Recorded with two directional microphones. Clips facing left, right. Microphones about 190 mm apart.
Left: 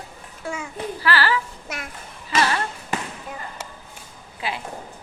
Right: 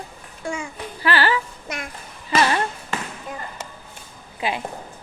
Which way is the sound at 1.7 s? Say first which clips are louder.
Right 2 dB; 5° left (ahead or behind).